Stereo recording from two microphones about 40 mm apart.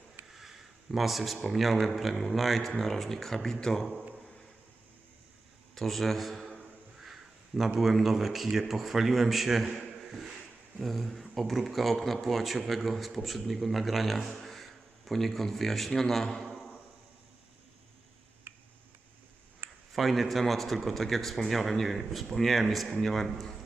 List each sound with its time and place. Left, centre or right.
0.3 s speech: centre
5.7 s a man's voice: centre
7.0 s a sound: centre
7.8 s a man's voice: centre
18.5 s tick-tock: right
19.9 s speech: centre